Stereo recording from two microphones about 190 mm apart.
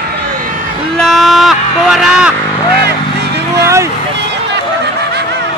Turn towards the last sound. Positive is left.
turn(degrees=-15)  # may be behind; listen again after turning